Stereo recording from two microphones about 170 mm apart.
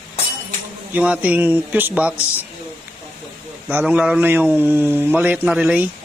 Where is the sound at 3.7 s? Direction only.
10° right (ahead or behind).